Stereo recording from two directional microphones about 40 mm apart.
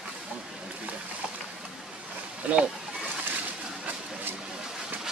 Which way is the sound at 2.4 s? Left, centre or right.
Right.